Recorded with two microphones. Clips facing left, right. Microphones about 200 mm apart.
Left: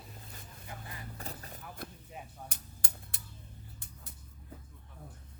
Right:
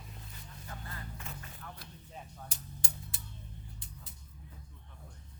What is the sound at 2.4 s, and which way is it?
Music, 60° left (ahead or behind).